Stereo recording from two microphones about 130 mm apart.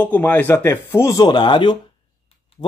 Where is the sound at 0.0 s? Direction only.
15° left (ahead or behind).